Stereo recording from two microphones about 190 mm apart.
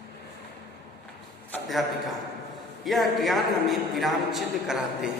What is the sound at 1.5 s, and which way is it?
A man's voice, centre (ahead or behind).